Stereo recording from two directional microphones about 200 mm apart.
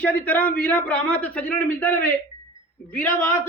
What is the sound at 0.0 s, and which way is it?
A man's voice, 5° left (ahead or behind).